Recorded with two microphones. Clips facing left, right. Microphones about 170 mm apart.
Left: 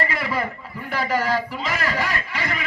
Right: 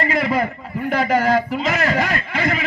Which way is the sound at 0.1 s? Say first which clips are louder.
Right 6 dB; 50° right (ahead or behind).